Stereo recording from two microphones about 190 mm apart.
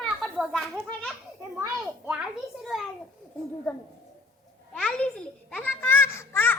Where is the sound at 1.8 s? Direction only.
5° right (ahead or behind).